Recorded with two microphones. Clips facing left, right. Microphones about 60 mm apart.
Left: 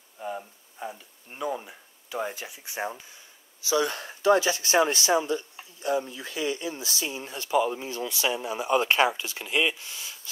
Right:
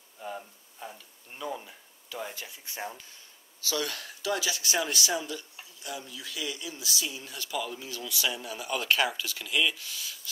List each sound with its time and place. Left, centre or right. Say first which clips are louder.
0.2 s speech: left 4 dB; centre